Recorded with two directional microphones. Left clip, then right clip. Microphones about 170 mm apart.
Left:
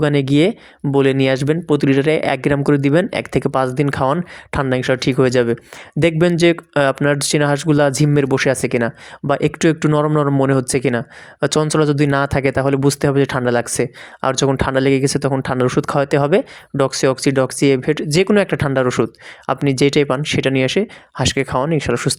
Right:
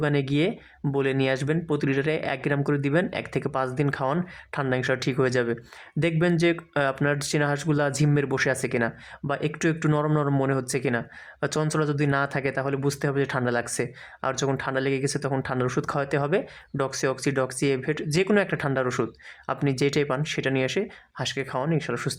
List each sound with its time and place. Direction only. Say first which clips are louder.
0.0 s speech: left 10 dB; 35° left (ahead or behind)